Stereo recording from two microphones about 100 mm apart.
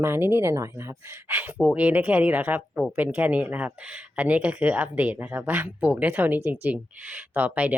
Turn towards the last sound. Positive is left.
turn(degrees=-15)  # may be behind; listen again after turning